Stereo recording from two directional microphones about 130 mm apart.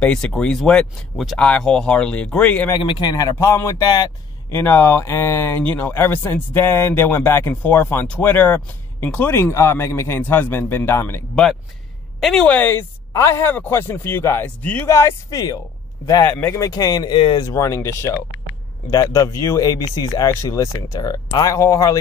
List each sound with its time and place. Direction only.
0.0 s speech: 5° left (ahead or behind)
2.8 s speech: 35° left (ahead or behind)
4.6 s speech: 15° left (ahead or behind)
12.2 s speech: 5° left (ahead or behind)
14.9 s speech: 25° left (ahead or behind)